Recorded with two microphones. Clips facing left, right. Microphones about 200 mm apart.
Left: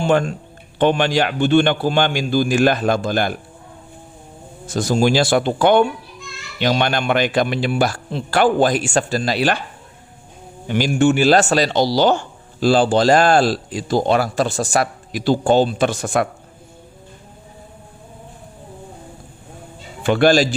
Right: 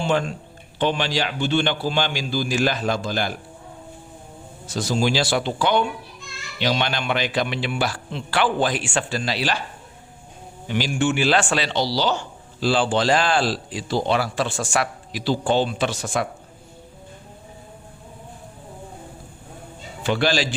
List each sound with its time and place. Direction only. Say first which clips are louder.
0.0 s a man's voice: left 5 dB; 50° left (ahead or behind)
4.6 s speech: left 5 dB; 50° left (ahead or behind)
10.7 s speech: left 6 dB; 50° left (ahead or behind)
15.9 s a man's voice: left 5 dB; 55° left (ahead or behind)
20.0 s speech: left 7 dB; 55° left (ahead or behind)